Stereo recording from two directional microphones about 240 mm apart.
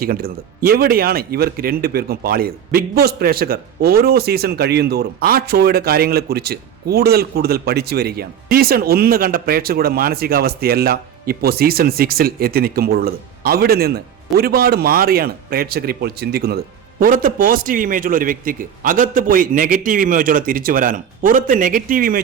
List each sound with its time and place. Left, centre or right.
0.0 s speech: right